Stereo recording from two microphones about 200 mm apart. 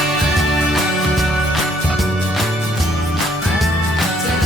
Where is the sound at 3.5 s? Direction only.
Centre (ahead or behind).